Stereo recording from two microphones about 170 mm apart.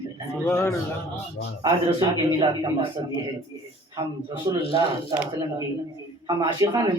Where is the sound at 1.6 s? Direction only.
25° right (ahead or behind).